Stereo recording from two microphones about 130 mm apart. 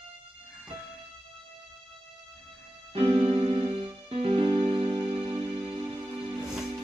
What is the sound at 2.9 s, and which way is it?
Music, 45° right (ahead or behind).